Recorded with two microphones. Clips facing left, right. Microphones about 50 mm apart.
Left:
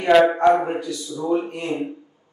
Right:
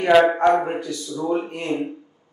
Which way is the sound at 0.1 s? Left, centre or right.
Centre.